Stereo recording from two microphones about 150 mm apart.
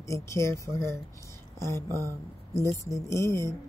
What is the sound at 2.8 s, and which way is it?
Speech, 20° left (ahead or behind).